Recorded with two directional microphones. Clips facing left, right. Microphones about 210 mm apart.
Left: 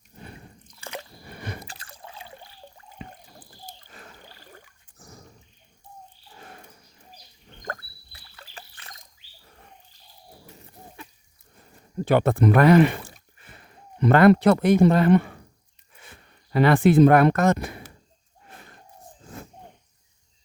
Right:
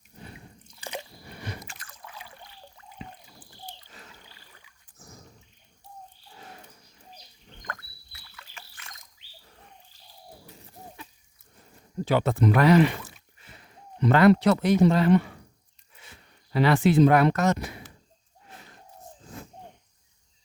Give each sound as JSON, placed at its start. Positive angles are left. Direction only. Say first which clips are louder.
{"t": 0.8, "sound": "squish", "louder": "even", "side_deg": -15}
{"t": 1.3, "sound": "a sound", "louder": "left 3 dB", "side_deg": 55}
{"t": 1.6, "sound": "water", "louder": "left 3 dB", "side_deg": 35}
{"t": 3.4, "sound": "rowboat", "louder": "right 4 dB", "side_deg": 45}
{"t": 7.6, "sound": "rowboat", "louder": "left 6 dB", "side_deg": 35}
{"t": 12.0, "sound": "speech", "louder": "left 4 dB", "side_deg": 55}
{"t": 13.1, "sound": "a sound", "louder": "left 2 dB", "side_deg": 50}
{"t": 16.0, "sound": "speech", "louder": "left 2 dB", "side_deg": 50}
{"t": 18.4, "sound": "a sound", "louder": "left 1 dB", "side_deg": 50}